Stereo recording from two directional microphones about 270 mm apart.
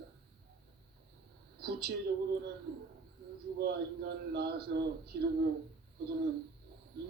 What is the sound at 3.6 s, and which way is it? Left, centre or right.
Speech, right.